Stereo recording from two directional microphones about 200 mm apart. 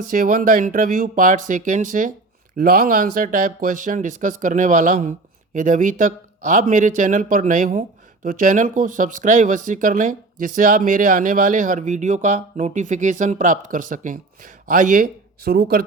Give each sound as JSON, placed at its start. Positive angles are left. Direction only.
{"t": 0.1, "sound": "speech", "side_deg": -45}